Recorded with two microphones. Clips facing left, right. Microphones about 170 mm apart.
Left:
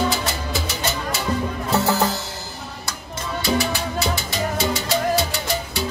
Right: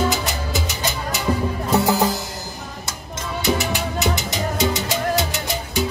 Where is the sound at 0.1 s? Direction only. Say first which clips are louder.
Right 1 dB; 20° right (ahead or behind).